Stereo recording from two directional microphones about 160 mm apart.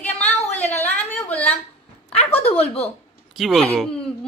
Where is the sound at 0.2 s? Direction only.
10° left (ahead or behind).